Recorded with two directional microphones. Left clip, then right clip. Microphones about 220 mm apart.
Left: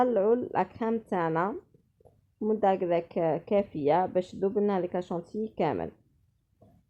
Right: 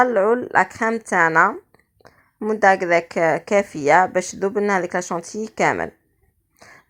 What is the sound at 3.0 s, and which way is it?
Speech, 45° right (ahead or behind).